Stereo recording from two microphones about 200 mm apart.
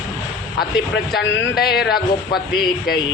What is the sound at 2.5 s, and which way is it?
Carnatic music, 20° left (ahead or behind).